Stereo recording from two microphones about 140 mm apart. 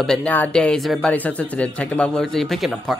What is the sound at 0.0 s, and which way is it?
Speech, 5° left (ahead or behind).